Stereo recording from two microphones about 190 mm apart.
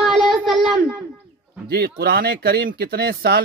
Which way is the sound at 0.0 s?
Centre (ahead or behind).